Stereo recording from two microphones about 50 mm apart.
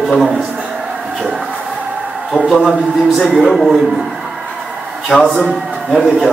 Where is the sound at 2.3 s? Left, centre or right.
Centre.